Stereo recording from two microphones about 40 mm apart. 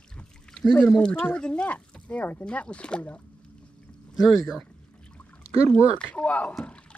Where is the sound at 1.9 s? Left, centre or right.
Left.